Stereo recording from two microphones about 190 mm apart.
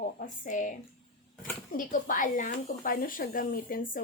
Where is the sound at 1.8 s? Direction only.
45° left (ahead or behind).